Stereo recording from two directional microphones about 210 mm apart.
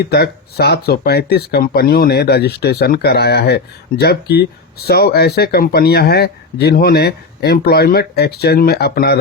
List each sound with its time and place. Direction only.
0.0 s speech: 50° left (ahead or behind)